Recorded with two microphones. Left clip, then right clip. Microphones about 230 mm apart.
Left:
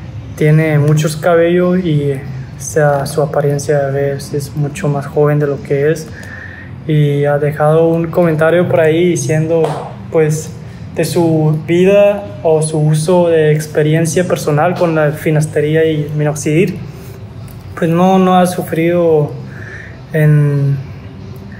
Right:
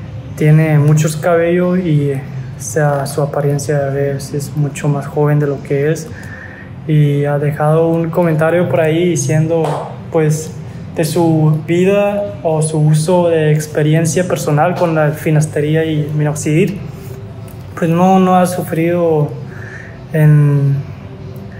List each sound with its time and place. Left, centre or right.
0.4 s speech: centre
11.1 s speech: centre
13.0 s speech: centre
17.7 s speech: centre